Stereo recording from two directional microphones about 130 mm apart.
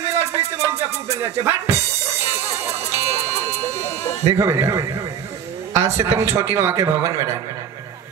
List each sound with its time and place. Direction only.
0.0 s music: 20° right (ahead or behind)
4.3 s a man's voice: 20° right (ahead or behind)